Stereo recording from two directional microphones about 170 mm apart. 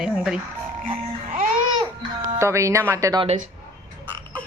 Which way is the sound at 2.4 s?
15° right (ahead or behind).